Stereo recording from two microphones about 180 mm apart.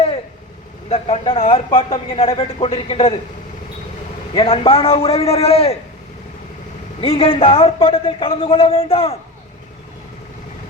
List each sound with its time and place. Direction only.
0.9 s a man's voice: 30° left (ahead or behind)
4.4 s a man's voice: 30° left (ahead or behind)
7.0 s a man's voice: 30° left (ahead or behind)